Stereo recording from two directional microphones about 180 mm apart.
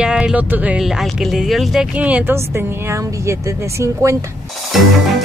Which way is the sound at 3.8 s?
15° right (ahead or behind).